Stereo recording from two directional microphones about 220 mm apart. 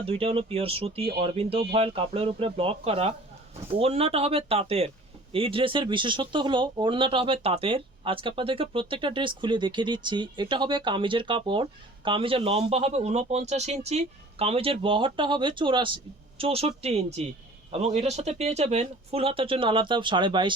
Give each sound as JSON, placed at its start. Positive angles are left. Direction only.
{"t": 0.0, "sound": "speech", "side_deg": -25}